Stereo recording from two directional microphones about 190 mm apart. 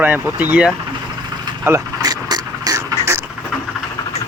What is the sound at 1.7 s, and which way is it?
Vehicle, 15° right (ahead or behind).